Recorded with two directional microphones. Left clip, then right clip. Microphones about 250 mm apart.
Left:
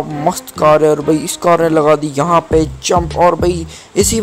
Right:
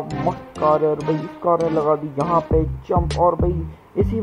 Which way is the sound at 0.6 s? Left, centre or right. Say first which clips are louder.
Left 8 dB; left.